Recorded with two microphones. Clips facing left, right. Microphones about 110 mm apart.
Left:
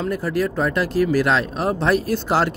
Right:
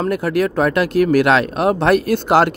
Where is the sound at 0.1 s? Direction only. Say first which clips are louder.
Right 4 dB; 65° right (ahead or behind).